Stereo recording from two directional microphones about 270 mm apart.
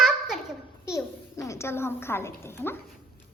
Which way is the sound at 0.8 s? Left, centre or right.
Centre.